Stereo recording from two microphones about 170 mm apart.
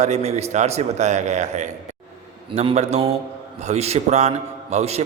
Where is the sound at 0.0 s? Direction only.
40° right (ahead or behind).